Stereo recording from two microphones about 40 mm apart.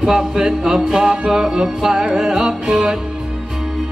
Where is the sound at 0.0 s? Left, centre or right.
Centre.